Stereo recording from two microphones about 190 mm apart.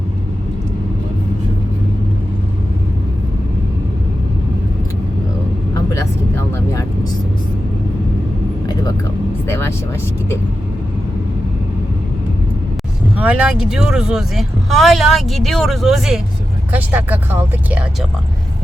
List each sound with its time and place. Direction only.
5.9 s vehicle: 15° left (ahead or behind)
9.5 s vehicle: 15° left (ahead or behind)
13.1 s speech: 5° right (ahead or behind)